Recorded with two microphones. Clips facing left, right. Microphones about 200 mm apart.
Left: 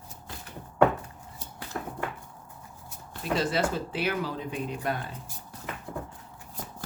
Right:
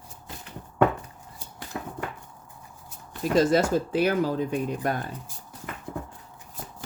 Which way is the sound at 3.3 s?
45° right (ahead or behind).